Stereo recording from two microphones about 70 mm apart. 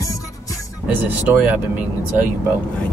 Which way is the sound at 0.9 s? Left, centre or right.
Right.